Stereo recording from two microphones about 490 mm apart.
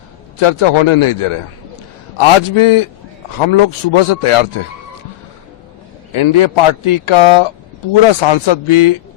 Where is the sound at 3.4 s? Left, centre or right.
Left.